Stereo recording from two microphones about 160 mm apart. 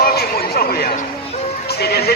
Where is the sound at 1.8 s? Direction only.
80° left.